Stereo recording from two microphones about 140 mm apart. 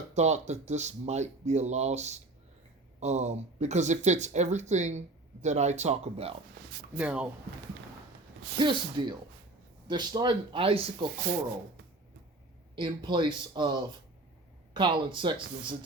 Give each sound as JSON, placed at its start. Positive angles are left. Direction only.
{"t": 0.1, "sound": "speech", "side_deg": -55}
{"t": 6.9, "sound": "speech", "side_deg": -10}
{"t": 8.5, "sound": "speech", "side_deg": -35}
{"t": 12.7, "sound": "speech", "side_deg": -35}